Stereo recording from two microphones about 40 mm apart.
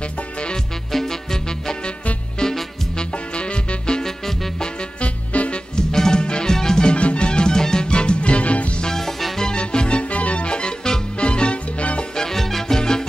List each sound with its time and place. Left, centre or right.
0.9 s music: centre
5.0 s music: left
5.8 s music: centre; by 8.6 s left
8.8 s music: centre
9.5 s music: left
12.2 s music: centre